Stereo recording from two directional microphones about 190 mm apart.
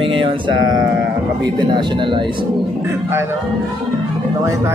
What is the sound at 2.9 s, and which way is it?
Speech, 10° right (ahead or behind).